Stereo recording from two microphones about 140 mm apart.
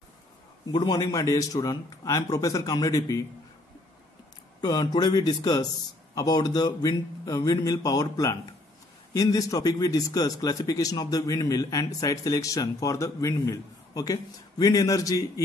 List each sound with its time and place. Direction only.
0.7 s a man's voice: 30° left (ahead or behind)
4.6 s a man's voice: 30° left (ahead or behind)